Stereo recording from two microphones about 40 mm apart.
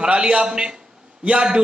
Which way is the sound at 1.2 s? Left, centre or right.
Right.